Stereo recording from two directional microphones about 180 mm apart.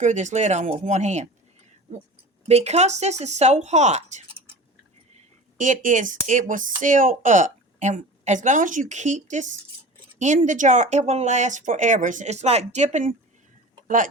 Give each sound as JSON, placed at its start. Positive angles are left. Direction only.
{"t": 0.0, "sound": "speech", "side_deg": -40}
{"t": 2.5, "sound": "speech", "side_deg": -35}
{"t": 5.5, "sound": "a woman's voice", "side_deg": -45}